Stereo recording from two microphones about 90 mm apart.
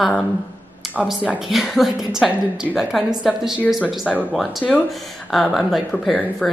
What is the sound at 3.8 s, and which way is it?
Speech, 15° left (ahead or behind).